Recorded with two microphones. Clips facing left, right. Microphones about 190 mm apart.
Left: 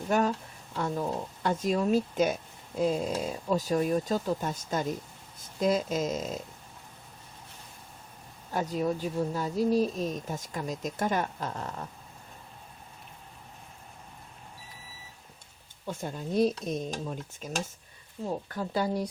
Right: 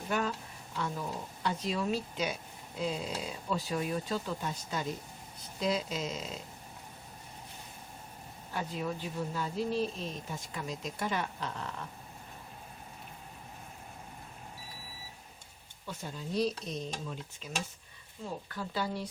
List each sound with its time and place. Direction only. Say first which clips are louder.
0.1 s a sound: left 7 dB; 40° left (ahead or behind)
0.8 s speech: left 6 dB; 45° left (ahead or behind)
8.5 s speech: left 7 dB; 45° left (ahead or behind)
15.9 s speech: left 5 dB; 50° left (ahead or behind)